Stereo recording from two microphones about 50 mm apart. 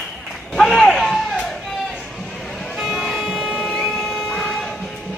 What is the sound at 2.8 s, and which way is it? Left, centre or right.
Music, centre.